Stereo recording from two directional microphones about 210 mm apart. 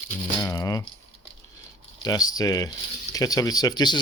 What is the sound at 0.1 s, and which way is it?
Crumpling, 15° left (ahead or behind).